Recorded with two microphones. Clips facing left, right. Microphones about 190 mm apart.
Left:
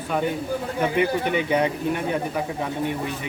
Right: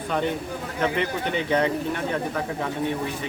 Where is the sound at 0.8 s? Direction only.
10° left (ahead or behind).